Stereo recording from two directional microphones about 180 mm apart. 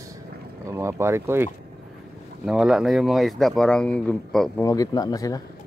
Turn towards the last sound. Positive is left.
turn(degrees=20)  # may be behind; listen again after turning